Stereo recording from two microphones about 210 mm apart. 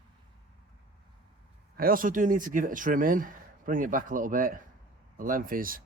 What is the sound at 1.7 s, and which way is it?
Speech, 45° right (ahead or behind).